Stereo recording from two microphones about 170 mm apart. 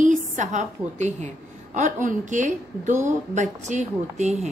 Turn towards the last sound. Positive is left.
turn(degrees=-45)  # may be behind; listen again after turning